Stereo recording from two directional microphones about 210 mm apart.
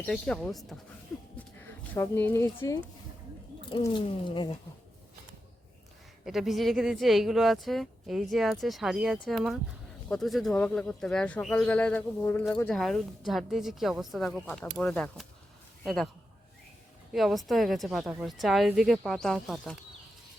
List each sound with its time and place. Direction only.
0.0 s speech: centre (ahead or behind)
1.4 s a sound: 10° left (ahead or behind)
3.7 s speech: 20° left (ahead or behind)
6.2 s a man's voice: centre (ahead or behind)
17.1 s speech: centre (ahead or behind)